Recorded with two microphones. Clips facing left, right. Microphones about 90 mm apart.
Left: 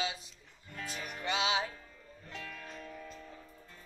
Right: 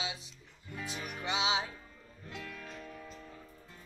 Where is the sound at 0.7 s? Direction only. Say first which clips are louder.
Right 1 dB; 10° right (ahead or behind).